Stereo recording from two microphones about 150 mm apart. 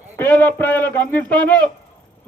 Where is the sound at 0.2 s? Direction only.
15° left (ahead or behind).